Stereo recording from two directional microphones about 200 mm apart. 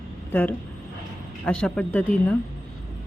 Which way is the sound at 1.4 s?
5° left (ahead or behind).